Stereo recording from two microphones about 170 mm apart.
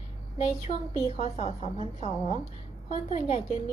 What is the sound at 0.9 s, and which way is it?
A woman's voice, 40° left (ahead or behind).